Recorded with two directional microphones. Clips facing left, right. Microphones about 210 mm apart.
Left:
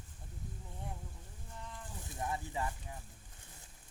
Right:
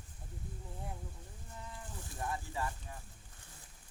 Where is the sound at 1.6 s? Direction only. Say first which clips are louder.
Even; 5° right (ahead or behind).